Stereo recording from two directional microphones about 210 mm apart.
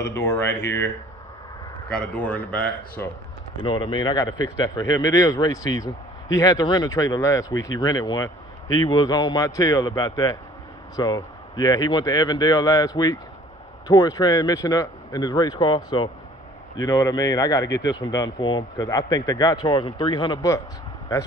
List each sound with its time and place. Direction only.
0.1 s speech: 15° left (ahead or behind)
3.6 s speech: 20° left (ahead or behind)